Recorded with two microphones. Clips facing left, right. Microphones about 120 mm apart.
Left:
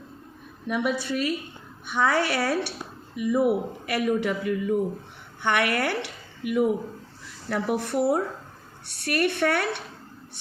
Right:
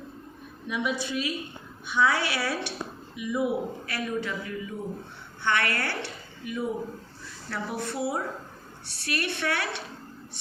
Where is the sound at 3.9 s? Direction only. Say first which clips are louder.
Left 9 dB; 90° left.